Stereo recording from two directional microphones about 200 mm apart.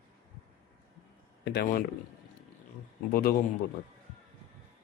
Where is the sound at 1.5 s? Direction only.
55° left (ahead or behind).